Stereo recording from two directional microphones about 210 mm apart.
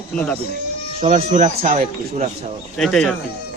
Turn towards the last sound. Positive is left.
turn(degrees=0)  # may be behind; listen again after turning